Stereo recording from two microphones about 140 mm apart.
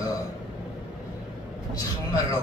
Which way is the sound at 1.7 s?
25° left (ahead or behind).